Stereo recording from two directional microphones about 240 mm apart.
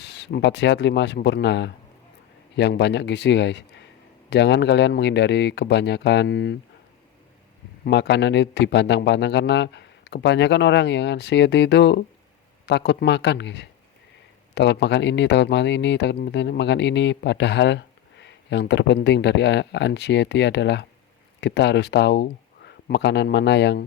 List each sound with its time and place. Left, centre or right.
0.0 s speech: left
7.9 s speech: left